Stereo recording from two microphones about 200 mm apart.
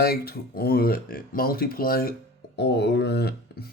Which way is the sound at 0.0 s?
50° left (ahead or behind).